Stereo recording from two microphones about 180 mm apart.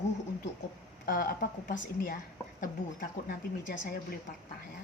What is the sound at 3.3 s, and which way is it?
Speech, 55° left (ahead or behind).